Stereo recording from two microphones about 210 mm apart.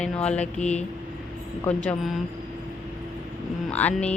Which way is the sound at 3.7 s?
5° left (ahead or behind).